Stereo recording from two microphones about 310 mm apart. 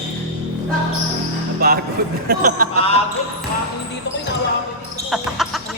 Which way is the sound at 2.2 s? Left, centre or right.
Right.